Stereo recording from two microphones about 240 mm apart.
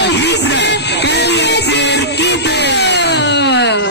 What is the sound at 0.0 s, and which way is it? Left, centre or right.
Music, left.